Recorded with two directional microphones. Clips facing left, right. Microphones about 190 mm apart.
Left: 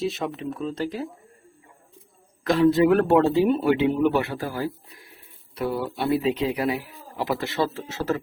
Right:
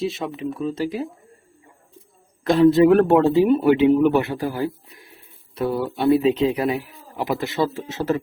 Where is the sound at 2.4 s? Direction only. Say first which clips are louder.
Right 4 dB; 25° right (ahead or behind).